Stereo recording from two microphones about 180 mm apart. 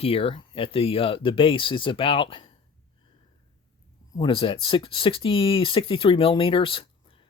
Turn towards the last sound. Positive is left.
turn(degrees=30)  # may be behind; listen again after turning